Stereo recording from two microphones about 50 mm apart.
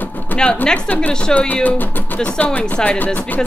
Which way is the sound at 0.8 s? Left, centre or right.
Left.